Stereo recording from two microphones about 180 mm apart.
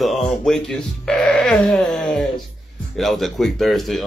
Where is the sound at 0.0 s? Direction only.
Centre (ahead or behind).